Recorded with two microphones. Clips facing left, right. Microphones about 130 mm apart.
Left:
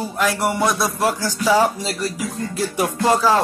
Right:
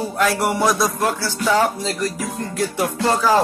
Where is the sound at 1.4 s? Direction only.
10° left (ahead or behind).